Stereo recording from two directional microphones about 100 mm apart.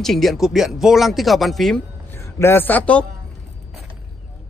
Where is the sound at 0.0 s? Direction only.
Centre (ahead or behind).